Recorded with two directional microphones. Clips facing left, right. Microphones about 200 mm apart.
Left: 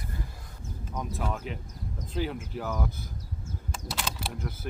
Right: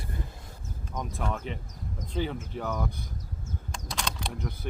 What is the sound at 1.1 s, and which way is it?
Speech, 5° left (ahead or behind).